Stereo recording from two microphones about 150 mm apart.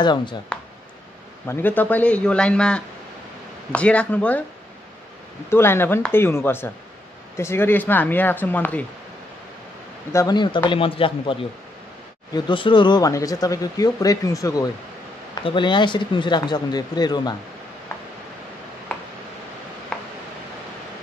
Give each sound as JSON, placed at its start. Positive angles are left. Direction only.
{"t": 0.0, "sound": "speech", "side_deg": 30}
{"t": 1.5, "sound": "speech", "side_deg": 10}
{"t": 5.5, "sound": "speech", "side_deg": 15}
{"t": 10.1, "sound": "speech", "side_deg": 30}
{"t": 12.4, "sound": "speech", "side_deg": 35}
{"t": 19.9, "sound": "tick-tock", "side_deg": 5}